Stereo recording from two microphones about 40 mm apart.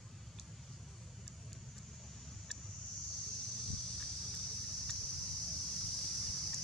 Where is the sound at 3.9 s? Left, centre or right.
Centre.